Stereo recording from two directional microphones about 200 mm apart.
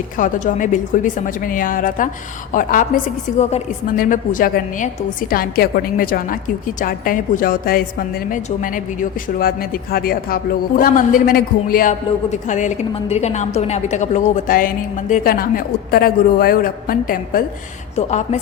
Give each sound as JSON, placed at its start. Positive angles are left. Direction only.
{"t": 0.2, "sound": "a woman's voice", "side_deg": 40}
{"t": 17.9, "sound": "a woman's voice", "side_deg": 35}